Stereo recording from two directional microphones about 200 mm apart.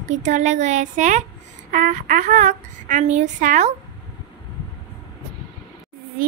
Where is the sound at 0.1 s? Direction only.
35° right (ahead or behind).